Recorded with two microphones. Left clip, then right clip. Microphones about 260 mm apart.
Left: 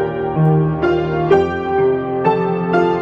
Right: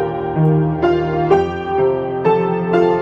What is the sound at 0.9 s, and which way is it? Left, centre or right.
Music, centre.